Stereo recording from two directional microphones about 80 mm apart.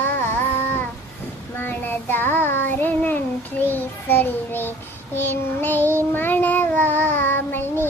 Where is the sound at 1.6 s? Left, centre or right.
Left.